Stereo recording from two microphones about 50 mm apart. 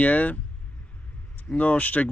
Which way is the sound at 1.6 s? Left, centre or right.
Left.